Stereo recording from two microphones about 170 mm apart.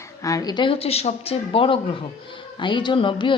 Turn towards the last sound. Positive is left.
turn(degrees=30)  # may be behind; listen again after turning